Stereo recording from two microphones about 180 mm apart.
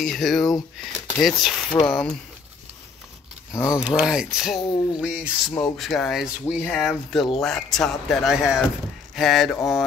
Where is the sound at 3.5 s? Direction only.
20° left (ahead or behind).